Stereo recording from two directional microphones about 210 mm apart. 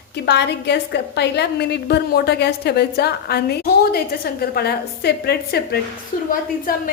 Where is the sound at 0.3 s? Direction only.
55° left (ahead or behind).